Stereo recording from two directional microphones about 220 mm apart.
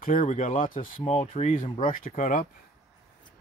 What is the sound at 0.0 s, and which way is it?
Speech, 40° left (ahead or behind).